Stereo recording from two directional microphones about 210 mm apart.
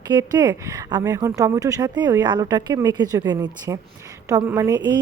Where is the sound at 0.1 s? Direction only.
20° right (ahead or behind).